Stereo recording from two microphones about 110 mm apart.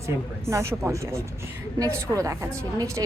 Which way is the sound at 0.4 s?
25° right (ahead or behind).